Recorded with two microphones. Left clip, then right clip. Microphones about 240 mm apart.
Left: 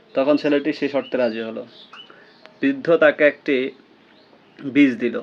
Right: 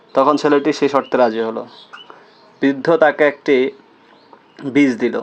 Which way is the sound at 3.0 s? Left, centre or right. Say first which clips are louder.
Right 1 dB; centre.